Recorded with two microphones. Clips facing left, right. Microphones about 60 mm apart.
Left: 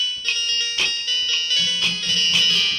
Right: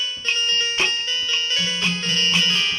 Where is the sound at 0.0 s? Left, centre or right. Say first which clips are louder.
Right 1 dB; right.